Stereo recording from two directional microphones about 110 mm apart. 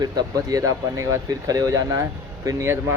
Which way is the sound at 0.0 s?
35° right (ahead or behind).